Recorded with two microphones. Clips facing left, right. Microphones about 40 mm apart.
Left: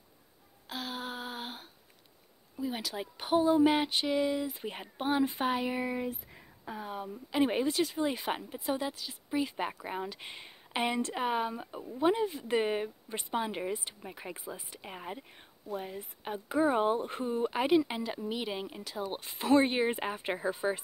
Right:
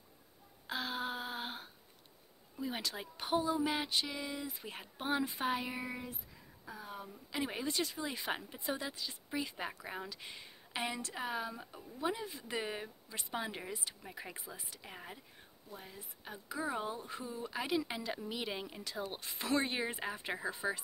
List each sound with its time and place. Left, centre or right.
0.7 s a sound: centre
2.5 s speech: centre
3.4 s speech: left
4.6 s speech: left
6.6 s speech: left
6.9 s speech: left
7.6 s speech: centre
9.8 s speech: left
15.7 s speech: left
17.6 s speech: left
19.5 s speech: left